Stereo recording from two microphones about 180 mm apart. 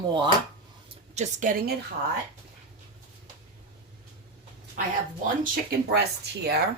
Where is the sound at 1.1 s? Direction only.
45° right (ahead or behind).